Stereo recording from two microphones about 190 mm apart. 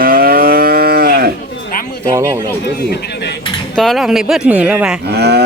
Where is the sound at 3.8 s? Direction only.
Centre (ahead or behind).